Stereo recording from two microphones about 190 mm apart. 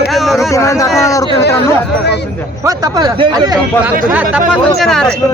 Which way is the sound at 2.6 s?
20° right (ahead or behind).